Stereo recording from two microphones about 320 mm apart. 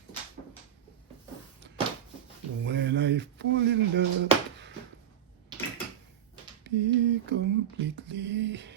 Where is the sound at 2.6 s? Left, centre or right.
Right.